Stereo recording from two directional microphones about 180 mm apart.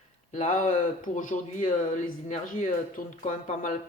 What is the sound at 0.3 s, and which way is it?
Speech, 40° left (ahead or behind).